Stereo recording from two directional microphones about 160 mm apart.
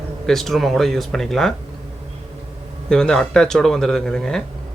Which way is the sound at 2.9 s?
5° left (ahead or behind).